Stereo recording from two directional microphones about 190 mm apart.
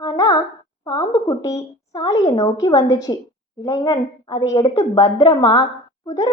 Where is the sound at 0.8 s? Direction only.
20° left (ahead or behind).